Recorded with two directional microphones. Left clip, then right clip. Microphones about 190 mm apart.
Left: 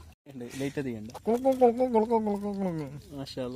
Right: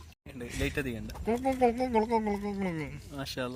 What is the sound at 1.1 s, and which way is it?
Speech, 20° left (ahead or behind).